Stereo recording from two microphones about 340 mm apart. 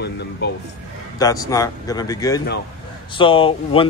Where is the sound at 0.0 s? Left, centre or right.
Left.